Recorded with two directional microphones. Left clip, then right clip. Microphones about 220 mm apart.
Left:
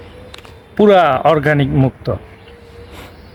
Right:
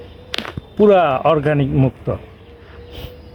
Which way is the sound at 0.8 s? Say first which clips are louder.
Left 2 dB; 20° left (ahead or behind).